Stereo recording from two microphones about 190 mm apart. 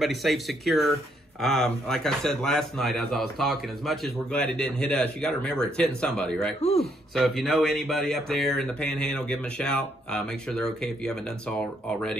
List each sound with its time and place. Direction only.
0.0 s speech: centre (ahead or behind)
6.6 s speech: 35° left (ahead or behind)
7.4 s speech: centre (ahead or behind)